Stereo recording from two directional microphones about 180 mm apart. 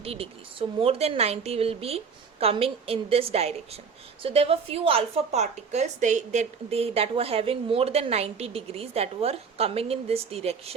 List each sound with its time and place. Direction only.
0.0 s a woman's voice: 35° right (ahead or behind)